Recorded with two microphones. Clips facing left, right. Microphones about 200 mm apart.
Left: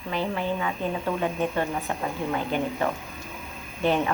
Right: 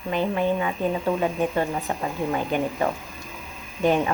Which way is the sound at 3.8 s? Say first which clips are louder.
Right 3 dB; 15° right (ahead or behind).